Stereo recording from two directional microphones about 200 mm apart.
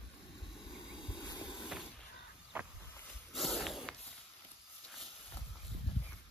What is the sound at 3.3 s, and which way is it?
Snort, centre (ahead or behind).